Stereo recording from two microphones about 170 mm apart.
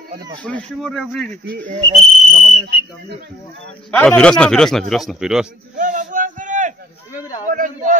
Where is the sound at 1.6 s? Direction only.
40° right (ahead or behind).